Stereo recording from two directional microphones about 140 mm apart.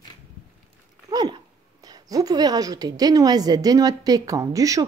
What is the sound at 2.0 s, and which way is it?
Speech, 25° right (ahead or behind).